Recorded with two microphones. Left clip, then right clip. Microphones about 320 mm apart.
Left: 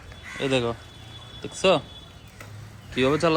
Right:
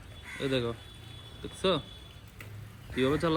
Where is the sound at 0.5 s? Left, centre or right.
Left.